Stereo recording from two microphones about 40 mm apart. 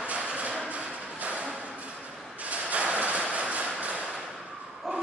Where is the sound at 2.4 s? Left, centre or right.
Right.